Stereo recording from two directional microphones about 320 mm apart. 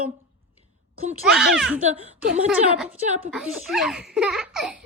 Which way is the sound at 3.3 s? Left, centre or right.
Centre.